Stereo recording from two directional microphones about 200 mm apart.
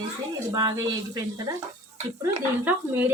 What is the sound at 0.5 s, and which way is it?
Speech, 20° right (ahead or behind).